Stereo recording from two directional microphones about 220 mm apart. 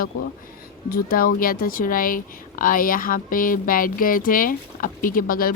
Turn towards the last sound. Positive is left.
turn(degrees=40)  # may be behind; listen again after turning